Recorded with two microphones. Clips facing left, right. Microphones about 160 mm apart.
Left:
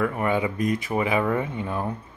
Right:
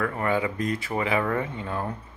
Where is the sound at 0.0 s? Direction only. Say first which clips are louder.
Left 2 dB; 20° left (ahead or behind).